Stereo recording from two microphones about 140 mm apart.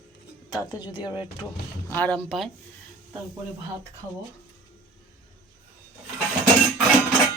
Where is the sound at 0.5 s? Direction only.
30° left (ahead or behind).